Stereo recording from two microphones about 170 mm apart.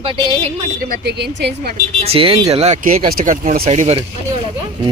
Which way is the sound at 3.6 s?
40° right (ahead or behind).